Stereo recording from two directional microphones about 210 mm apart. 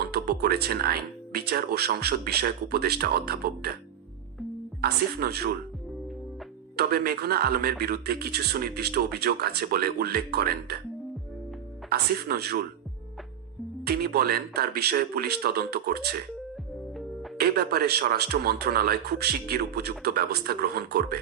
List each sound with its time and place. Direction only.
0.1 s a man's voice: 50° right (ahead or behind)
4.8 s a man's voice: 50° right (ahead or behind)
6.7 s a man's voice: 50° right (ahead or behind)
11.9 s a man's voice: 50° right (ahead or behind)
13.8 s a man's voice: 50° right (ahead or behind)
17.3 s a man's voice: 50° right (ahead or behind)